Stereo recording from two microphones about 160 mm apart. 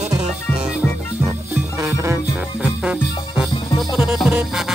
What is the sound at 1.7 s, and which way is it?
Music, 15° right (ahead or behind).